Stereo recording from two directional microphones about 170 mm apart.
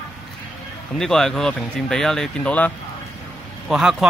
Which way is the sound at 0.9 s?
5° left (ahead or behind).